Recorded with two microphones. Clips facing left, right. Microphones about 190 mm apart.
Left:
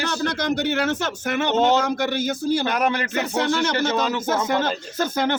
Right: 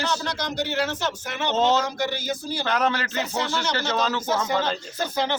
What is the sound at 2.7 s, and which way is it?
Speech, 10° left (ahead or behind).